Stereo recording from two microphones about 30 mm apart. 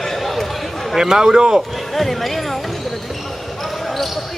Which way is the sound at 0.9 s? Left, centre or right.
Centre.